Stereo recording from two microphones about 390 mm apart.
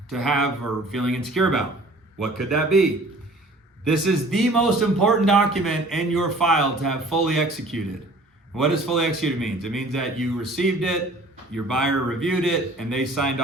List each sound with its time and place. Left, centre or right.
0.1 s a man's voice: centre
3.8 s a man's voice: centre